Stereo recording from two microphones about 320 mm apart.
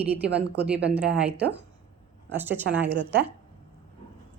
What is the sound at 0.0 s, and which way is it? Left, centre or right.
Speech, centre.